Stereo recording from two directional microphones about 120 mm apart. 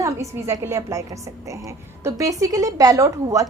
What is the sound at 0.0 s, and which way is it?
A woman's voice, 25° right (ahead or behind).